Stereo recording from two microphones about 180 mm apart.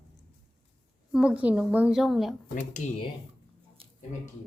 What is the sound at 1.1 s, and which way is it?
A woman's voice, 5° right (ahead or behind).